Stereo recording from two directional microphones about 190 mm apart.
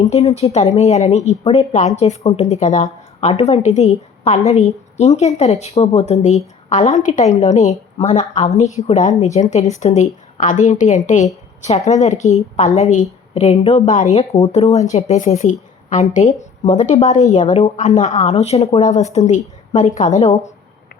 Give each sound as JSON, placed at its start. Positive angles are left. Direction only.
{"t": 0.1, "sound": "speech", "side_deg": 35}